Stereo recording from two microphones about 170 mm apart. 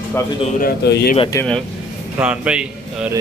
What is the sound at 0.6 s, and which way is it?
Speech, 65° left (ahead or behind).